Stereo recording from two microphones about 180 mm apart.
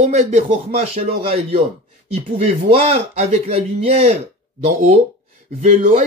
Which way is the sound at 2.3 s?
35° right (ahead or behind).